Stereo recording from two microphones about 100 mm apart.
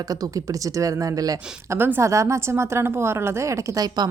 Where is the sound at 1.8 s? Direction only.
20° right (ahead or behind).